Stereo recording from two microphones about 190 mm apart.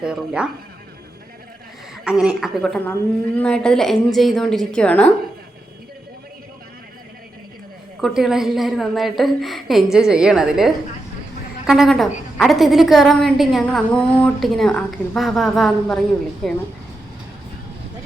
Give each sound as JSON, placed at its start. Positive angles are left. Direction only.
{"t": 0.0, "sound": "a woman's voice", "side_deg": -5}
{"t": 2.0, "sound": "a woman's voice", "side_deg": -5}
{"t": 8.0, "sound": "a woman's voice", "side_deg": 0}